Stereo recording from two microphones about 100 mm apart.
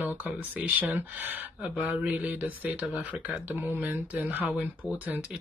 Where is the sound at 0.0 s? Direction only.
20° right (ahead or behind).